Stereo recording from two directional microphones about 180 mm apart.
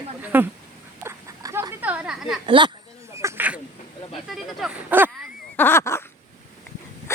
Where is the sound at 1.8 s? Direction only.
10° right (ahead or behind).